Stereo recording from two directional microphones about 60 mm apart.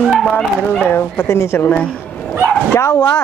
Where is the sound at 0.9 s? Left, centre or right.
Left.